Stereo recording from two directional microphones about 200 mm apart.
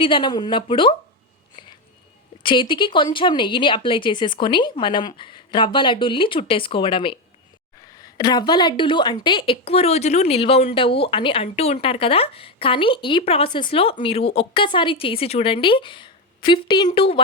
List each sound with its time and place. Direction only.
0.0 s a woman's voice: 25° left (ahead or behind)
1.6 s a sound: 25° left (ahead or behind)
2.4 s a woman's voice: 25° left (ahead or behind)